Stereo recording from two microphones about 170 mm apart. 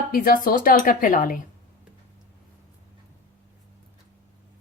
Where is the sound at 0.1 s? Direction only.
60° left (ahead or behind).